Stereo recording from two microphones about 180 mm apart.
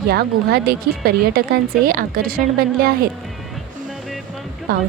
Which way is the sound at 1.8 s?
50° right (ahead or behind).